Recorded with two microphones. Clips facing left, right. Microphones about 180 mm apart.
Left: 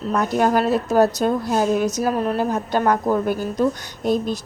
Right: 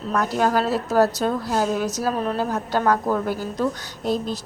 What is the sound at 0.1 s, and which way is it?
A woman's voice, 20° left (ahead or behind).